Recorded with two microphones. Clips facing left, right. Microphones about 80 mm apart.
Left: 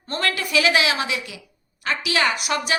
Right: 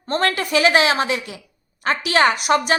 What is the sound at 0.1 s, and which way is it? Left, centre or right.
A woman's voice, right.